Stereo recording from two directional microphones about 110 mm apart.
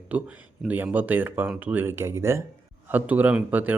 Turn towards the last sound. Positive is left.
turn(degrees=-15)  # may be behind; listen again after turning